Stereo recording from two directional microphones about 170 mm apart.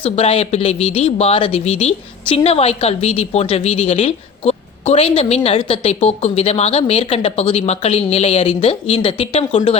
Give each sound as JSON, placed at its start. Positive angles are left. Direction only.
{"t": 0.0, "sound": "speech", "side_deg": 35}